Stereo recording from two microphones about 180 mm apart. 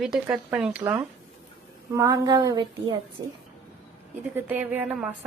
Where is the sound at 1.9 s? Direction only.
20° right (ahead or behind).